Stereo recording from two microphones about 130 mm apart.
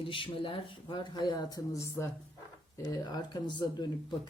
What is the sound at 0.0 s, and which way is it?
Speech, 40° left (ahead or behind).